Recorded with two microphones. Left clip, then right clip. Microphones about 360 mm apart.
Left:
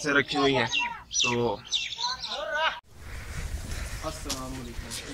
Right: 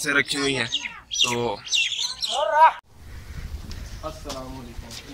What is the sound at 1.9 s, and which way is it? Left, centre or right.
Bird, right.